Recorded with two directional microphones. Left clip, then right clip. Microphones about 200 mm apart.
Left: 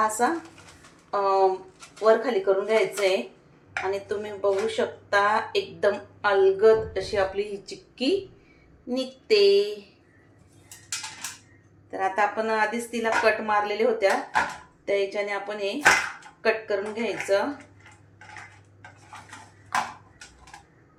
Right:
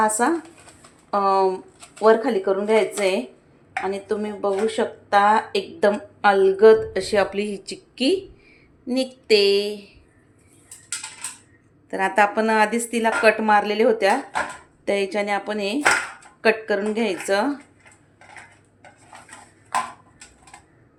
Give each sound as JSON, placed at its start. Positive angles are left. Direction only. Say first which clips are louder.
{"t": 0.0, "sound": "speech", "louder": "right 4 dB", "side_deg": -55}
{"t": 11.9, "sound": "speech", "louder": "right 5 dB", "side_deg": -55}